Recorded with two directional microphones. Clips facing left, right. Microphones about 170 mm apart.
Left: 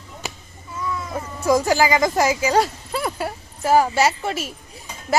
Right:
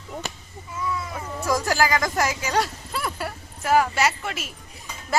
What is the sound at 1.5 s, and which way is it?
Speech, 20° left (ahead or behind).